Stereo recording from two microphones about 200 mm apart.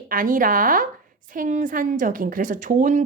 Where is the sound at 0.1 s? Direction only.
45° right (ahead or behind).